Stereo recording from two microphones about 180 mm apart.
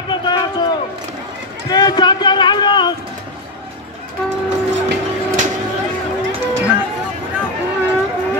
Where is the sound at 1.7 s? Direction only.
20° left (ahead or behind).